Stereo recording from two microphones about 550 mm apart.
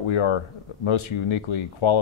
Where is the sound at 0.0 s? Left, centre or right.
Left.